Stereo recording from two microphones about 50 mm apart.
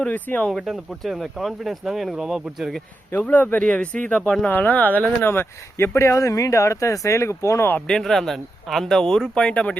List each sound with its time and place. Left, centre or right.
0.4 s speech: centre
3.2 s speech: left
4.4 s speech: left
5.2 s speech: left
7.9 s speech: centre